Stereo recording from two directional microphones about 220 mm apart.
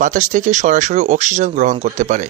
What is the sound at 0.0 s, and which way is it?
Speech, 35° right (ahead or behind).